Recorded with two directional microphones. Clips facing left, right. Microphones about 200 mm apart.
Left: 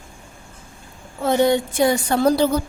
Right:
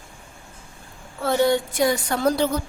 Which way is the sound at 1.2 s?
20° left (ahead or behind).